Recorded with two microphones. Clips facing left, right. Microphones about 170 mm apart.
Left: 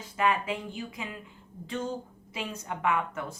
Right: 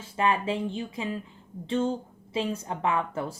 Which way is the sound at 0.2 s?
30° right (ahead or behind).